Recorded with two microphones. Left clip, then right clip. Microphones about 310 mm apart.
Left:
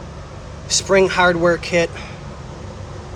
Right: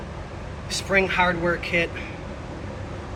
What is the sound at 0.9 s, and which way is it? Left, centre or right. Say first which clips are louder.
Speech: left 6 dB; left.